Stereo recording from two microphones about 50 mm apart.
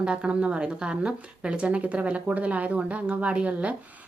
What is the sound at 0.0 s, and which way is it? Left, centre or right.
Speech, centre.